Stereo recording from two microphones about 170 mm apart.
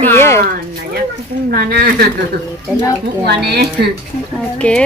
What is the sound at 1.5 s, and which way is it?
Speech, 65° right (ahead or behind).